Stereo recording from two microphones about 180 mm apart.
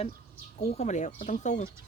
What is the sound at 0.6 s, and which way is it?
Speech, 35° left (ahead or behind).